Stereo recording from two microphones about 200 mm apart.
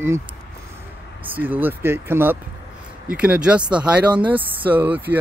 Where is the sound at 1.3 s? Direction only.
10° right (ahead or behind).